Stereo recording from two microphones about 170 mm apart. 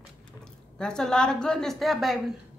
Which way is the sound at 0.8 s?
5° left (ahead or behind).